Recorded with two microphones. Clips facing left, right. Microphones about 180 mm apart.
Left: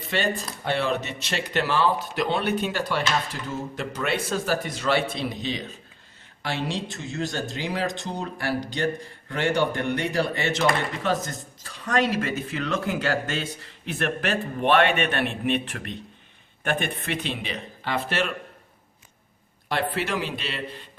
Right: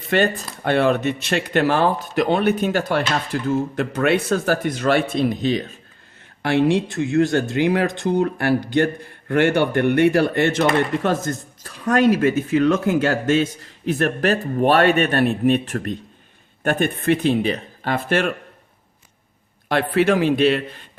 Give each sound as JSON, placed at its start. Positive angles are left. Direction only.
{"t": 0.1, "sound": "speech", "side_deg": -55}
{"t": 19.6, "sound": "speech", "side_deg": -55}